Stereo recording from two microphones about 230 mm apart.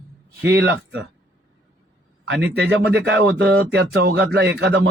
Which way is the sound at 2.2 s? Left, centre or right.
Right.